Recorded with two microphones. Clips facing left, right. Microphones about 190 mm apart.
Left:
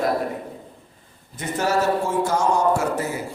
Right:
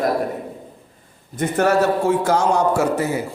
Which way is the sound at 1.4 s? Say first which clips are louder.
Right 7 dB; 55° right (ahead or behind).